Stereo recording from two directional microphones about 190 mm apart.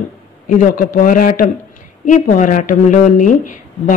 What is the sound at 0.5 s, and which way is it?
Speech, 45° left (ahead or behind).